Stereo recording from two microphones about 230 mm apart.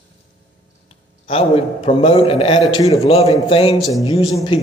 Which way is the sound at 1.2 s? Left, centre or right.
Left.